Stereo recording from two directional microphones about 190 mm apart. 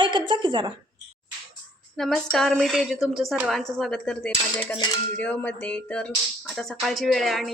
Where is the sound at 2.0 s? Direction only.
Centre (ahead or behind).